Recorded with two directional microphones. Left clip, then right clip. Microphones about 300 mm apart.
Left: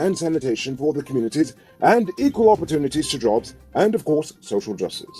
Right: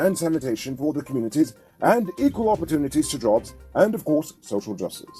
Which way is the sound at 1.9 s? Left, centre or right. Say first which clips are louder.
Left 2 dB; right.